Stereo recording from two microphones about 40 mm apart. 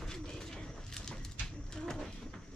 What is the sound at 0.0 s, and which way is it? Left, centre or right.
Bird, centre.